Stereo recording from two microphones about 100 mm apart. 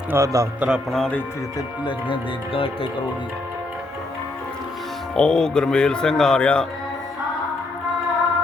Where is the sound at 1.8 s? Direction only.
60° left (ahead or behind).